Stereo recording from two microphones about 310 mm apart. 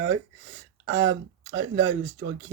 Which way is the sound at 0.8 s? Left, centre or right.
Right.